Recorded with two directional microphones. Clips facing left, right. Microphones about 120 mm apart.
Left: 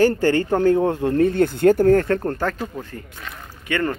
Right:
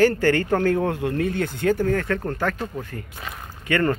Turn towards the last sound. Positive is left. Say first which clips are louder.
# right 2 dB
turn(degrees=20)  # may be behind; listen again after turning